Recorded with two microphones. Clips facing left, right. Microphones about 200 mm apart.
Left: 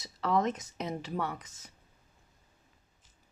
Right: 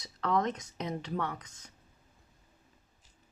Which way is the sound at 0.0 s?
5° left (ahead or behind).